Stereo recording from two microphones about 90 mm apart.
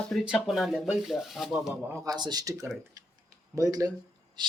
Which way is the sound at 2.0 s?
50° right (ahead or behind).